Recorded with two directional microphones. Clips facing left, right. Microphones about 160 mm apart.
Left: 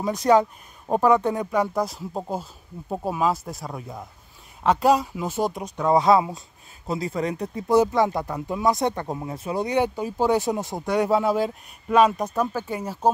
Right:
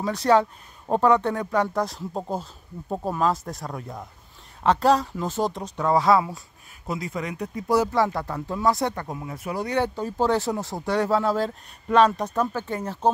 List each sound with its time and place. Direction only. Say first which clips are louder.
0.0 s speech: left 1 dB; 15° left (ahead or behind)
6.9 s speech: left 4 dB; 30° left (ahead or behind); by 13.1 s 10° left (ahead or behind)